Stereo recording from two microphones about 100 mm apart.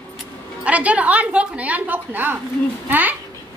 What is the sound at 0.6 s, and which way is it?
A woman's voice, 15° right (ahead or behind).